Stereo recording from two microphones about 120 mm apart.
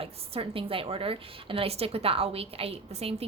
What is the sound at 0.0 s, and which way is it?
A woman's voice, 50° right (ahead or behind).